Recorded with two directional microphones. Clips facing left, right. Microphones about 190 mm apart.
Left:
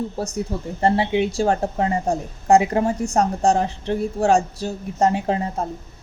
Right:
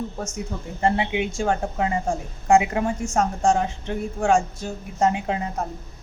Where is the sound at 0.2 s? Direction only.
35° left (ahead or behind).